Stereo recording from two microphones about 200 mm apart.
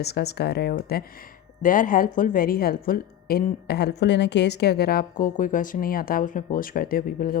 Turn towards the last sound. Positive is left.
turn(degrees=45)  # may be behind; listen again after turning